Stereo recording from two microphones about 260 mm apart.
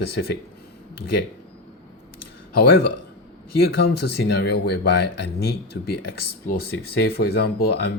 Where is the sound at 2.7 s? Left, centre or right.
Left.